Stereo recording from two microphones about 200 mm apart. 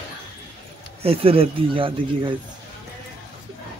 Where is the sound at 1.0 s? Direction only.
30° right (ahead or behind).